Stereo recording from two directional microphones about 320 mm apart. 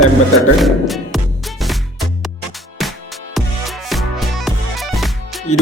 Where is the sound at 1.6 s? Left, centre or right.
Centre.